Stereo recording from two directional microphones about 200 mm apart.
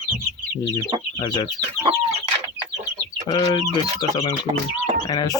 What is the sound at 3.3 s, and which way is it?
Speech, 20° left (ahead or behind).